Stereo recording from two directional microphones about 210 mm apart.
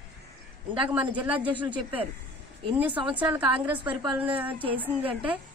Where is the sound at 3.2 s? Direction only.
25° right (ahead or behind).